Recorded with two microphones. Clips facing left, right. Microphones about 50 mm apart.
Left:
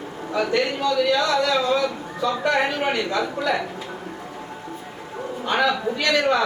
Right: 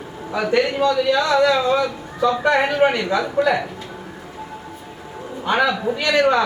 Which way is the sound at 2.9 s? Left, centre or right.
Right.